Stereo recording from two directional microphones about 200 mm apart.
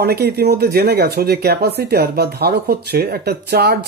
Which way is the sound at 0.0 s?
50° right (ahead or behind).